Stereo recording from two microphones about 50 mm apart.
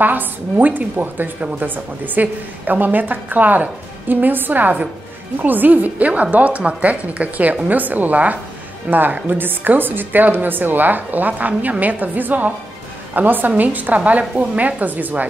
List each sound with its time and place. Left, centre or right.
0.0 s a woman's voice: right